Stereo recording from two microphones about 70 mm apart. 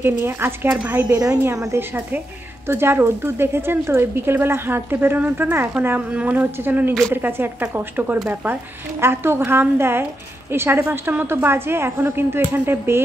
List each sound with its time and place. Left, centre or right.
0.0 s speech: right
1.1 s a woman's voice: right
1.4 s speech: right